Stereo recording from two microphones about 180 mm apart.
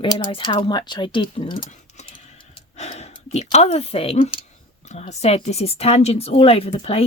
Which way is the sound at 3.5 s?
35° left (ahead or behind).